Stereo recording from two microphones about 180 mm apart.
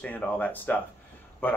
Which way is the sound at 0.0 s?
10° left (ahead or behind).